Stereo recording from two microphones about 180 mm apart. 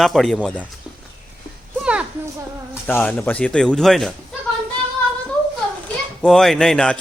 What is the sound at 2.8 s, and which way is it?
A man's voice, 10° left (ahead or behind).